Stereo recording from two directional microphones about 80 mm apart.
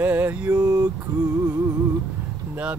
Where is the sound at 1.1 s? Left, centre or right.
Right.